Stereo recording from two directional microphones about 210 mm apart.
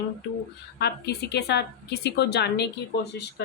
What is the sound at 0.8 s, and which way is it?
A woman's voice, 50° left (ahead or behind).